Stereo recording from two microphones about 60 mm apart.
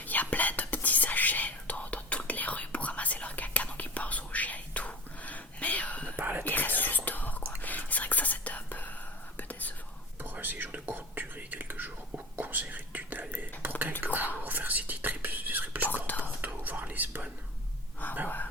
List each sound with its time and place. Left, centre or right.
0.0 s whispering: left
6.1 s whispering: right
6.4 s whispering: left
10.2 s whispering: right
18.0 s a sound: left